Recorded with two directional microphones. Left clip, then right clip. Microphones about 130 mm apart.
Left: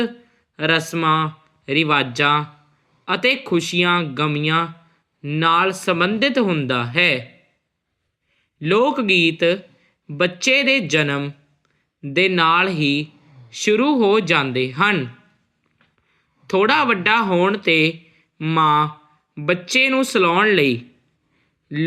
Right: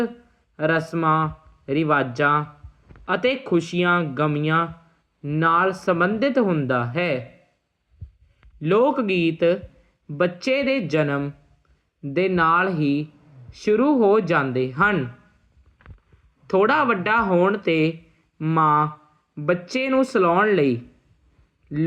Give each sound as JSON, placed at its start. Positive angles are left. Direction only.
{"t": 0.5, "sound": "speech", "side_deg": 20}
{"t": 8.5, "sound": "speech", "side_deg": 25}
{"t": 16.5, "sound": "speech", "side_deg": 20}